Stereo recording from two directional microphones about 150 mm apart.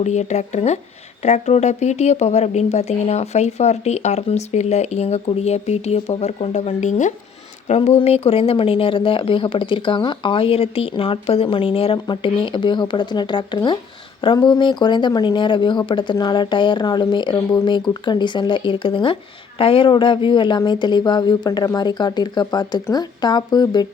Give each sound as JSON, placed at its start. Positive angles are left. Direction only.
{"t": 0.0, "sound": "a woman's voice", "side_deg": 50}